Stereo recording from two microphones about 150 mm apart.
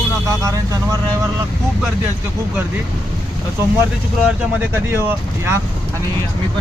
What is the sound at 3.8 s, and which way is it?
Speech, 10° right (ahead or behind).